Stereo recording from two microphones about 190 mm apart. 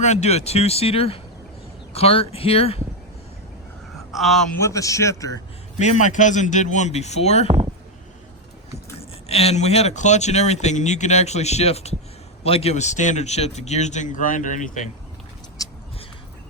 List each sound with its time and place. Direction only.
0.0 s speech: 35° left (ahead or behind)
4.1 s speech: centre (ahead or behind)
4.6 s a man's voice: 15° left (ahead or behind)
5.8 s speech: 40° left (ahead or behind)
9.0 s speech: 30° left (ahead or behind)